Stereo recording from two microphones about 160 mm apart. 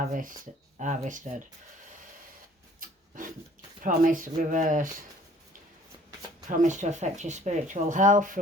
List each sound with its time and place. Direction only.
0.1 s speech: 55° right (ahead or behind)
2.8 s rub: 60° right (ahead or behind)
3.8 s speech: 55° right (ahead or behind)
6.5 s speech: 50° right (ahead or behind)